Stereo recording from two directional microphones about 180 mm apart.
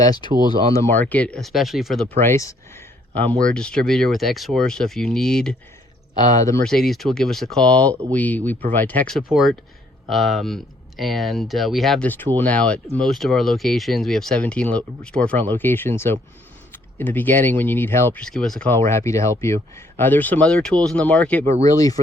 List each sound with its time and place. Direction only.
0.7 s speech: 10° left (ahead or behind)
2.1 s speech: 15° left (ahead or behind)
6.6 s speech: 5° left (ahead or behind)
21.6 s speech: 20° left (ahead or behind)